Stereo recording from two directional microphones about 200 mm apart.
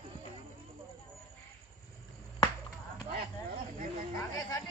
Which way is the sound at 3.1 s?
50° right (ahead or behind).